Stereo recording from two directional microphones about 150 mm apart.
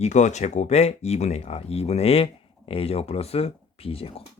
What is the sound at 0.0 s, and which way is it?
Speech, 50° left (ahead or behind).